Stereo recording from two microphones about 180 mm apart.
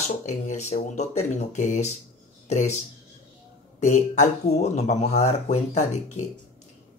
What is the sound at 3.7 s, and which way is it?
Speech, 40° left (ahead or behind).